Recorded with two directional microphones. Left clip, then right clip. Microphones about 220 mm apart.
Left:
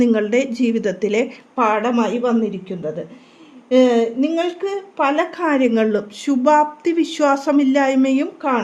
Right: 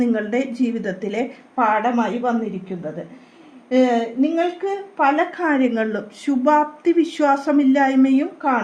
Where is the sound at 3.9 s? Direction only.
50° left (ahead or behind).